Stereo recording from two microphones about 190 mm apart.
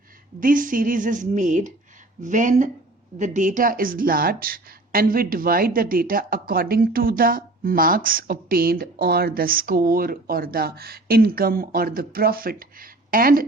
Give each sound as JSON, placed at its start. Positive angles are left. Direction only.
{"t": 0.3, "sound": "a woman's voice", "side_deg": -45}